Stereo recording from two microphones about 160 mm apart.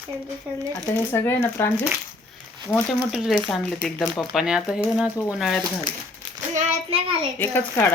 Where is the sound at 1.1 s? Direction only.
15° left (ahead or behind).